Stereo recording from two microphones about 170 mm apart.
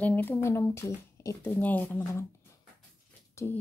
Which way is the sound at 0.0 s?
10° left (ahead or behind).